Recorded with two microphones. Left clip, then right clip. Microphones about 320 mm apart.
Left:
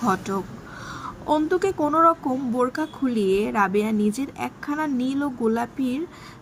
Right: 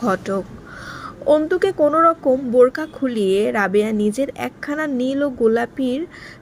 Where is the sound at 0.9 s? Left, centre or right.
Centre.